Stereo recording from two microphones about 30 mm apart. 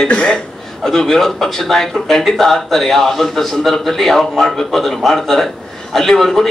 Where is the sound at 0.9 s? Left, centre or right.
Centre.